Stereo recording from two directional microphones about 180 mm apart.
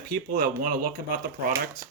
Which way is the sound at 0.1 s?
55° right (ahead or behind).